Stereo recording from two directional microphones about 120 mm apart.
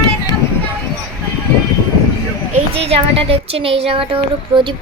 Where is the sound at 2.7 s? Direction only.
55° right (ahead or behind).